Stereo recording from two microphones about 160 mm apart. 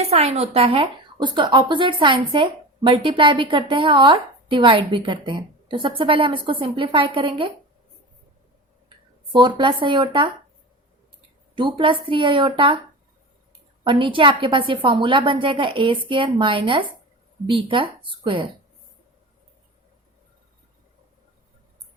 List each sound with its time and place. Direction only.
0.1 s speech: 40° right (ahead or behind)
9.3 s speech: 30° right (ahead or behind)
11.5 s speech: 30° right (ahead or behind)
13.8 s speech: 30° right (ahead or behind)